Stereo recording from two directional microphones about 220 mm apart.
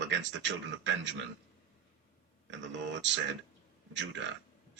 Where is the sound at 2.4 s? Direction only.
55° right (ahead or behind).